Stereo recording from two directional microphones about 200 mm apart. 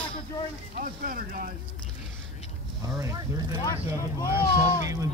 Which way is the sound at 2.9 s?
15° right (ahead or behind).